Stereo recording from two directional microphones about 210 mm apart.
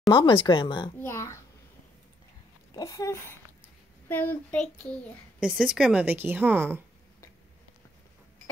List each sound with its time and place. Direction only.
0.1 s speech: 25° left (ahead or behind)
0.9 s a child's voice: 10° left (ahead or behind)
2.7 s a child's voice: 15° left (ahead or behind); by 6.8 s 10° right (ahead or behind)